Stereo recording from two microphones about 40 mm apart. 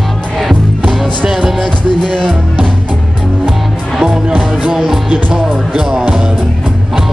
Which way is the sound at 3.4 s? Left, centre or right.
Centre.